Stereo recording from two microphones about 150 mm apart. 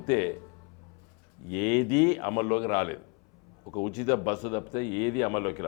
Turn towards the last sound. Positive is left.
turn(degrees=15)  # may be behind; listen again after turning